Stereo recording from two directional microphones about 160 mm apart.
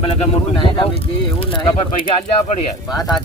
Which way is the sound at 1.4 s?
30° left (ahead or behind).